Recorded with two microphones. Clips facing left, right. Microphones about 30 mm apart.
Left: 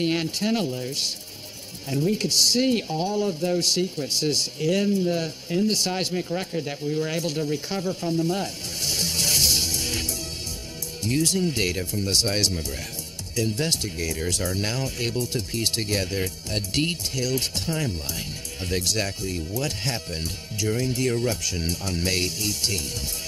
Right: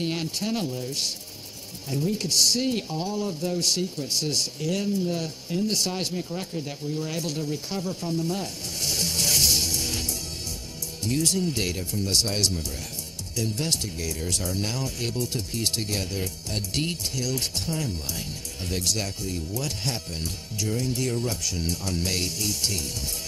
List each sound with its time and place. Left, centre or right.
0.0 s speech: left
8.8 s music: centre
11.1 s speech: left